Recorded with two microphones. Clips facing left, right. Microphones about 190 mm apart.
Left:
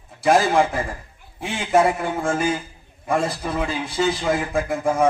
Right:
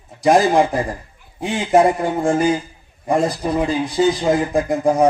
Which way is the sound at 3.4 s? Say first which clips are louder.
Right 6 dB; 35° right (ahead or behind).